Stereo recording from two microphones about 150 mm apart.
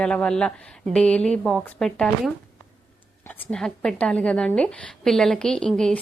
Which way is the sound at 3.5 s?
5° left (ahead or behind).